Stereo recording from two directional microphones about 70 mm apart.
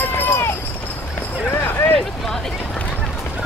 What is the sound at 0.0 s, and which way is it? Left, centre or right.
Run, left.